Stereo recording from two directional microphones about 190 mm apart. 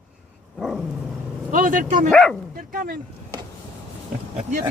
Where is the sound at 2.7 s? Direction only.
50° right (ahead or behind).